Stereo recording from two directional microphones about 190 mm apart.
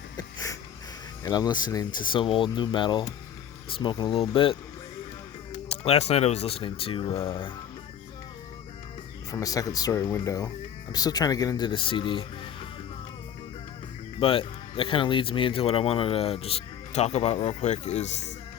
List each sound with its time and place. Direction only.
1.2 s speech: 20° left (ahead or behind)
5.6 s speech: 30° left (ahead or behind)
9.3 s speech: 20° left (ahead or behind)
14.2 s speech: 30° left (ahead or behind)